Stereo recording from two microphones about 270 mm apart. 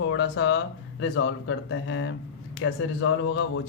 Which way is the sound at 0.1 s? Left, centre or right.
Left.